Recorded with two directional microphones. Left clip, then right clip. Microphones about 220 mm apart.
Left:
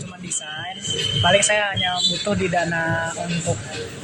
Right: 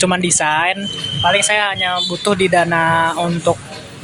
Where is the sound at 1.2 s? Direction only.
10° right (ahead or behind); by 3.1 s 30° right (ahead or behind).